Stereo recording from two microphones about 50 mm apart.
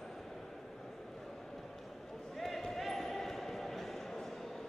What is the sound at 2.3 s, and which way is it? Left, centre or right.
Basketball bounce, centre.